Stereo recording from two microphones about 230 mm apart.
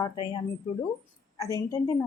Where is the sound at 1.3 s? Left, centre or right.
Centre.